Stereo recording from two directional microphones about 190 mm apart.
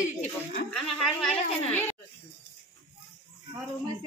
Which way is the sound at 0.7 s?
Centre (ahead or behind).